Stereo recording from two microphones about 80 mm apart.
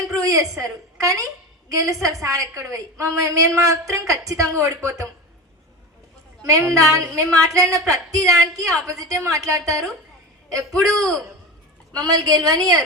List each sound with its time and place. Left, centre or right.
0.1 s a sound: right
0.6 s a woman's voice: right
6.5 s a woman's voice: right
10.8 s a man's voice: centre
11.9 s a woman's voice: right